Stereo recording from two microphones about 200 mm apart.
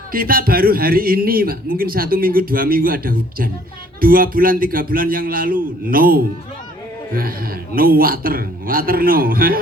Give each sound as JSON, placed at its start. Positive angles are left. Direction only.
{"t": 0.1, "sound": "a man's voice", "side_deg": -45}